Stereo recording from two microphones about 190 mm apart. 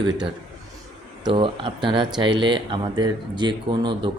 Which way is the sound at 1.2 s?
25° right (ahead or behind).